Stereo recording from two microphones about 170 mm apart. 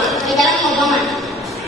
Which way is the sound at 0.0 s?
Centre (ahead or behind).